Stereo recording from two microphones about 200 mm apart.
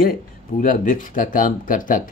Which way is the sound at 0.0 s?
45° left (ahead or behind).